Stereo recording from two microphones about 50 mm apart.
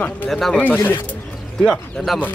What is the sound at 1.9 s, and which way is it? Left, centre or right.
Speech, centre.